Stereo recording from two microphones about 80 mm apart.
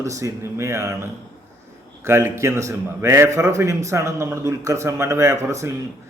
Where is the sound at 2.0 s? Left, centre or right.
Right.